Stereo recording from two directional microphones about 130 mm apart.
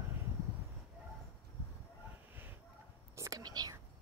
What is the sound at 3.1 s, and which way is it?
Whispering, 25° right (ahead or behind).